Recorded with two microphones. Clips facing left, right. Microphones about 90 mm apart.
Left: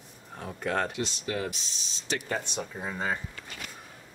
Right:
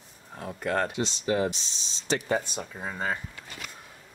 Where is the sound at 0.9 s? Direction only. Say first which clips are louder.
Right 5 dB; 25° right (ahead or behind).